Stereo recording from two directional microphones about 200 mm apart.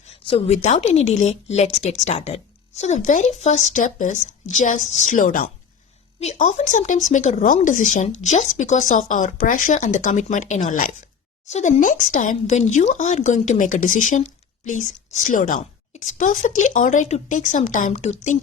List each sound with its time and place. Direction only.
0.3 s speech: 30° left (ahead or behind)